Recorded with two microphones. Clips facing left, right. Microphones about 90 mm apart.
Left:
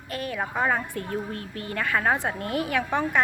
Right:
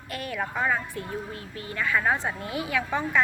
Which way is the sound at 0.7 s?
55° left (ahead or behind).